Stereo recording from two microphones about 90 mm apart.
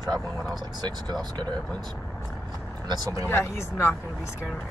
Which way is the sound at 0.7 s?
50° right (ahead or behind).